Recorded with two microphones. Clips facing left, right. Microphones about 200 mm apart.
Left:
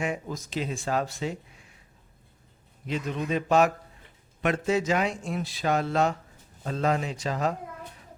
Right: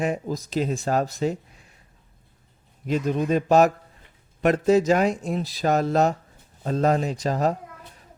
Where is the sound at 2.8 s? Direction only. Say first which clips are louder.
Right 7 dB; 45° right (ahead or behind).